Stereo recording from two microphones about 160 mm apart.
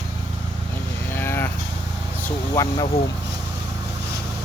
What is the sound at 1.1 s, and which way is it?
Cattle, 15° left (ahead or behind).